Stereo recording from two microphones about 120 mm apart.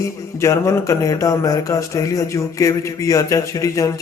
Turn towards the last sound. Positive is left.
turn(degrees=30)  # may be behind; listen again after turning